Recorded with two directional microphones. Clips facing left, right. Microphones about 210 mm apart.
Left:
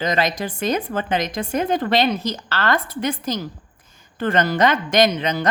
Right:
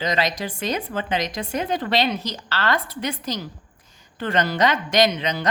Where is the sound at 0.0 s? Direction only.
50° left (ahead or behind).